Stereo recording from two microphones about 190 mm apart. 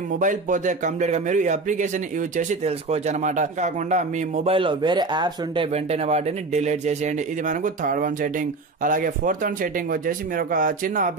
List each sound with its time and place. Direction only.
0.2 s speech: 40° right (ahead or behind)
4.5 s speech: 25° right (ahead or behind); by 11.1 s 45° right (ahead or behind)